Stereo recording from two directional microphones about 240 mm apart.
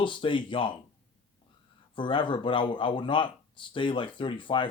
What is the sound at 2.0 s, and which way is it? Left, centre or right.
Speech, centre.